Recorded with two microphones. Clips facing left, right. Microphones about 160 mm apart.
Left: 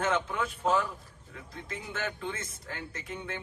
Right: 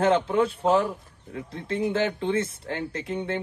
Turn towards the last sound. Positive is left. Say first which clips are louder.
# right 10 dB
turn(degrees=-30)  # may be behind; listen again after turning